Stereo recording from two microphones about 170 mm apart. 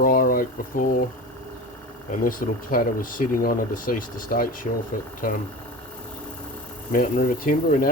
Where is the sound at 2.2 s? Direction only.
55° left (ahead or behind).